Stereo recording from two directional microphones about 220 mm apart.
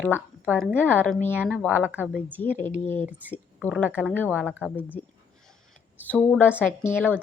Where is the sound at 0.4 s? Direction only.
5° right (ahead or behind).